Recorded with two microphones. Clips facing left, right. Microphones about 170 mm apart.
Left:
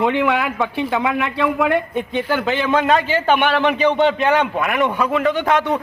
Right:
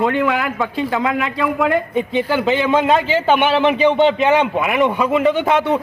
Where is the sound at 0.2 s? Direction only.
Centre (ahead or behind).